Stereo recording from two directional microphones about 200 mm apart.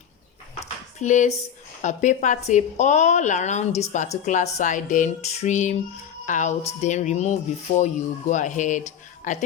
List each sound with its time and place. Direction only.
0.9 s a woman's voice: 35° left (ahead or behind)